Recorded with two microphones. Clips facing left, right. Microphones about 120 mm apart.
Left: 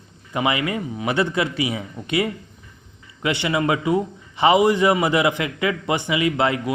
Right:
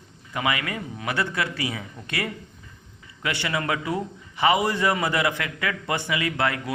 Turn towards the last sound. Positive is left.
turn(degrees=20)  # may be behind; listen again after turning